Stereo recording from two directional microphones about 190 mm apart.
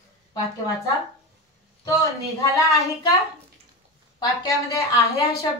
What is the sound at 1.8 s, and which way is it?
Speech, 15° left (ahead or behind).